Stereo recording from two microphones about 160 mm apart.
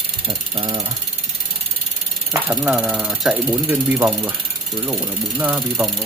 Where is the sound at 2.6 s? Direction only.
5° right (ahead or behind).